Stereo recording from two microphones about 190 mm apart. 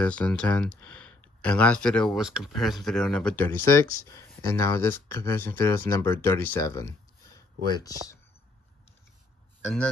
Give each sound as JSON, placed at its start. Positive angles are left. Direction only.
{"t": 0.0, "sound": "speech", "side_deg": 5}